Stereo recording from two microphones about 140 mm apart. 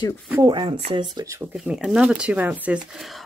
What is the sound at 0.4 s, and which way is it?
Speech, 30° right (ahead or behind).